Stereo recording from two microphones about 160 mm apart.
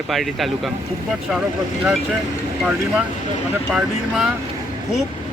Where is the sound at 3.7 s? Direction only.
5° right (ahead or behind).